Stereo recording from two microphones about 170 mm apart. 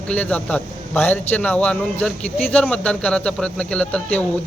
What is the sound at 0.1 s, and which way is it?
A man's voice, 10° left (ahead or behind).